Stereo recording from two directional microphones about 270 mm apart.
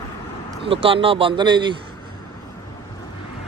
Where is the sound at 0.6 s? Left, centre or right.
Centre.